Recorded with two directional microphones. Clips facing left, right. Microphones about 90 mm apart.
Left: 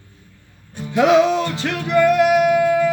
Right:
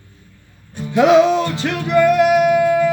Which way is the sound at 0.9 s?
25° right (ahead or behind).